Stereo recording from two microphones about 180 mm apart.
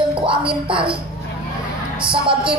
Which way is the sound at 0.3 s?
30° right (ahead or behind).